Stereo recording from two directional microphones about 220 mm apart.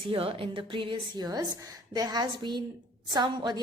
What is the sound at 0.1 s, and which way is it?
A woman's voice, 25° right (ahead or behind).